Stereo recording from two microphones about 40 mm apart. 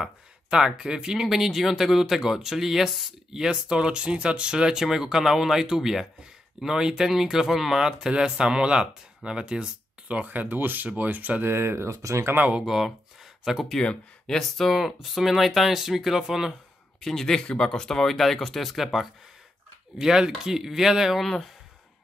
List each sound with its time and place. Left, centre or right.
0.0 s speech: centre
1.2 s speech: centre; by 10.2 s right
10.2 s speech: right
11.4 s speech: right
12.6 s speech: centre
13.7 s speech: centre
14.4 s speech: centre
17.0 s a man's voice: centre
17.4 s speech: left
17.6 s speech: centre
20.0 s speech: centre
21.2 s speech: centre